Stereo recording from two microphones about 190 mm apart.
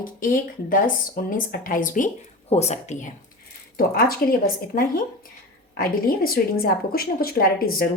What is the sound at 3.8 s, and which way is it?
A woman's voice, 50° left (ahead or behind).